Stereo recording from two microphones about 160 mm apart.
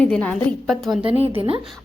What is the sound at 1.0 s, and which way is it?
Speech, 35° right (ahead or behind).